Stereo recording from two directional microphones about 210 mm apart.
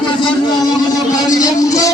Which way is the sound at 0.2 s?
20° left (ahead or behind).